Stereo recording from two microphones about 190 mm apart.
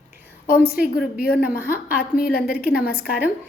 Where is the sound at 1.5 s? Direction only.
10° right (ahead or behind).